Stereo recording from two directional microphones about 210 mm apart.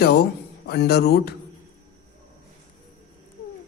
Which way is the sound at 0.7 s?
50° left (ahead or behind).